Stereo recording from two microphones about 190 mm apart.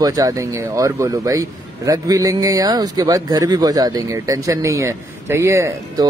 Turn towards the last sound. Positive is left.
turn(degrees=-15)  # may be behind; listen again after turning